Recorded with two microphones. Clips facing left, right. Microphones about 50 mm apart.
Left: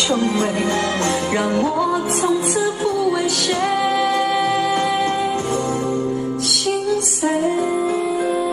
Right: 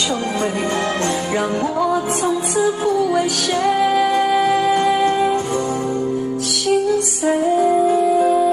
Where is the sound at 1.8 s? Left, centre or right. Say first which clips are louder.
Right 1 dB; centre; by 5.4 s right.